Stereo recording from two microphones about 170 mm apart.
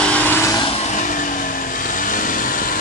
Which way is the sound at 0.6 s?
35° left (ahead or behind).